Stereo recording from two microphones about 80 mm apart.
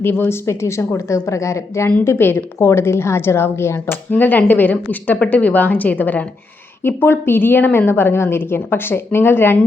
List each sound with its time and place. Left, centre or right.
0.0 s a woman's voice: left
4.1 s a woman's voice: left